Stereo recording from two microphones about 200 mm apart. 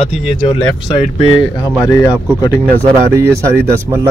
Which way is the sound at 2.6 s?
15° right (ahead or behind).